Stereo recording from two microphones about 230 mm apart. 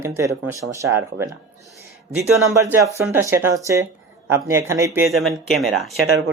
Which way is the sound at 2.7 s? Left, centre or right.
Centre.